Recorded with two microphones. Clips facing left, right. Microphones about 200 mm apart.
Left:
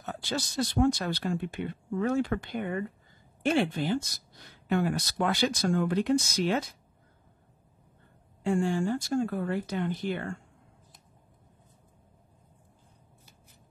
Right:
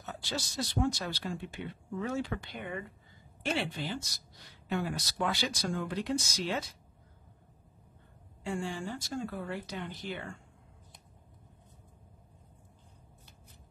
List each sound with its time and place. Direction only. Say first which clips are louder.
0.0 s speech: left 5 dB; 55° left (ahead or behind)
8.5 s speech: left 9 dB; 50° left (ahead or behind)